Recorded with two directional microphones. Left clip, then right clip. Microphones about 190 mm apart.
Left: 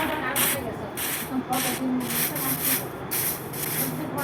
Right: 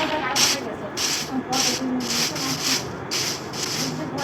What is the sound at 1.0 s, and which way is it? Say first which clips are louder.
Rub: right 7 dB; 10° left (ahead or behind).